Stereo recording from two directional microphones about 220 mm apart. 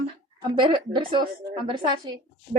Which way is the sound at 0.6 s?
20° right (ahead or behind).